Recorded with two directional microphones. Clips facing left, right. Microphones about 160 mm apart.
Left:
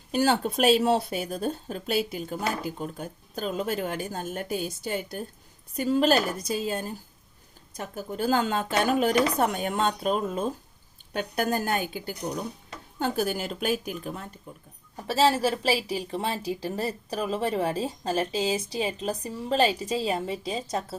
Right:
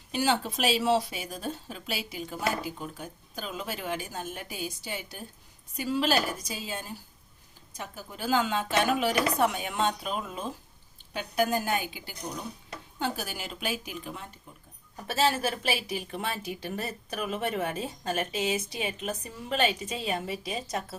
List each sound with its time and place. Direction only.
0.1 s speech: 50° left (ahead or behind)
4.8 s a woman's voice: 55° left (ahead or behind); by 20.8 s 30° left (ahead or behind)